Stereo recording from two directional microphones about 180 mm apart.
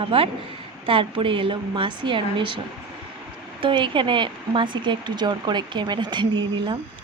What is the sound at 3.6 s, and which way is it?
Speech, 30° right (ahead or behind).